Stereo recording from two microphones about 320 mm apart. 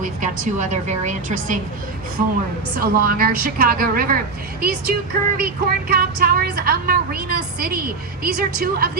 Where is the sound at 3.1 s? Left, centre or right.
Right.